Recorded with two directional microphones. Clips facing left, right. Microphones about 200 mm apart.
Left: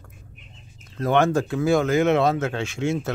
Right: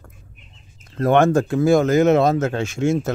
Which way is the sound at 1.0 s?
50° right (ahead or behind).